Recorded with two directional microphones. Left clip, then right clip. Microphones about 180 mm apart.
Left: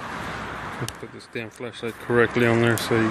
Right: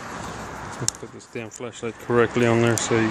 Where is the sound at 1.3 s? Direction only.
5° right (ahead or behind).